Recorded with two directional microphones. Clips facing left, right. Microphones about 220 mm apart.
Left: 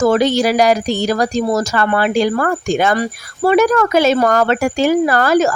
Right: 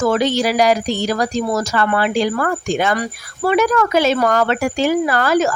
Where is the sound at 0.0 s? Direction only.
45° left (ahead or behind).